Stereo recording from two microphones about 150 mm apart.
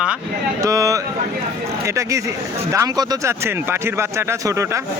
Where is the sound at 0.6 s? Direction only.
20° right (ahead or behind).